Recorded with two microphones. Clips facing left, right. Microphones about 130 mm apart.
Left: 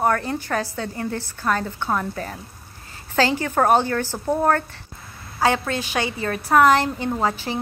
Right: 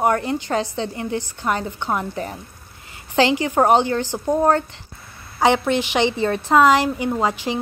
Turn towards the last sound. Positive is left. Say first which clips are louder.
# right 2 dB
turn(degrees=-15)  # may be behind; listen again after turning